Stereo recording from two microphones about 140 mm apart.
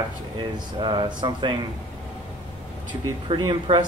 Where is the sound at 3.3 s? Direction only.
35° right (ahead or behind).